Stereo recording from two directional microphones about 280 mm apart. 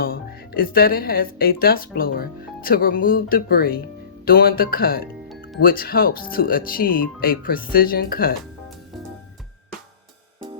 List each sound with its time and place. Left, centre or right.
0.0 s speech: left